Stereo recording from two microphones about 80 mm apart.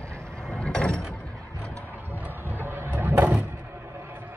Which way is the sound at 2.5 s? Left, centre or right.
Right.